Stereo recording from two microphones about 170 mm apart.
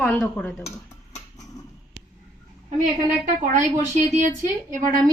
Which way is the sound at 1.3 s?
20° left (ahead or behind).